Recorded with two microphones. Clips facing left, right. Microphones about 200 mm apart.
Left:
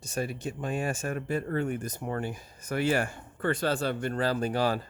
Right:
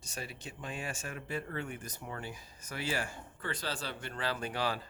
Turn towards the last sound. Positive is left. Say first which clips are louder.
# left 8 dB
turn(degrees=45)  # may be behind; listen again after turning